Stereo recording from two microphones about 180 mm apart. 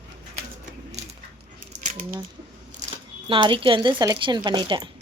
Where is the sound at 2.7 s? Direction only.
40° right (ahead or behind).